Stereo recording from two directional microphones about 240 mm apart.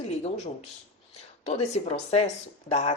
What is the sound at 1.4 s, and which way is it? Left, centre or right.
Speech, left.